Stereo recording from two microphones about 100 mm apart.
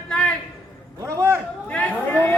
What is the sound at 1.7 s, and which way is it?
Speech, 15° left (ahead or behind).